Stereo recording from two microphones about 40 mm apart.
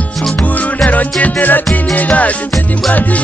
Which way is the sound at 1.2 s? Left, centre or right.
Left.